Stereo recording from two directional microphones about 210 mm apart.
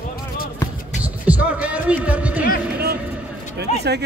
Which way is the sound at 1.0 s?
5° right (ahead or behind).